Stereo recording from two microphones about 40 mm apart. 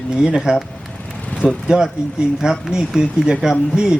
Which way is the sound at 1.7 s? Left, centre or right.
Centre.